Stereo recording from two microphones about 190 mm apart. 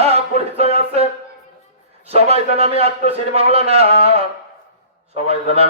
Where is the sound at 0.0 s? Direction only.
30° right (ahead or behind).